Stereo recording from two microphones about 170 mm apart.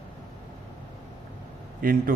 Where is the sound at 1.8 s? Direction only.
55° right (ahead or behind).